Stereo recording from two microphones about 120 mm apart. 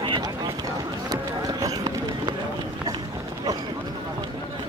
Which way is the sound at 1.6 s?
30° right (ahead or behind).